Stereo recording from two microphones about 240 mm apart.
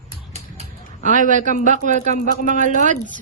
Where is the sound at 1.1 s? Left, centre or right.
Right.